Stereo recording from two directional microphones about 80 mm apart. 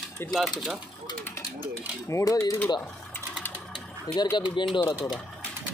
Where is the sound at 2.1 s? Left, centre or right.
Left.